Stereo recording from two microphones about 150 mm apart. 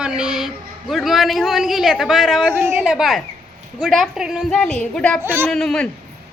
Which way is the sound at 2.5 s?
15° right (ahead or behind).